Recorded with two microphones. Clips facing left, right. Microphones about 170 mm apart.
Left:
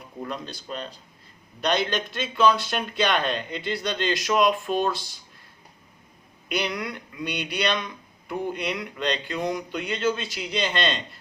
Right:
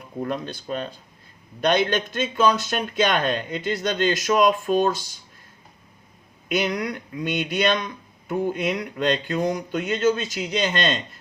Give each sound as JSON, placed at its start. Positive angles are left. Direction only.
{"t": 0.2, "sound": "a man's voice", "side_deg": -50}
{"t": 6.5, "sound": "a man's voice", "side_deg": -45}